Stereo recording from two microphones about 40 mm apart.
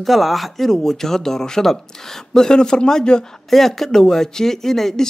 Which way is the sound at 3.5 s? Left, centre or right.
Centre.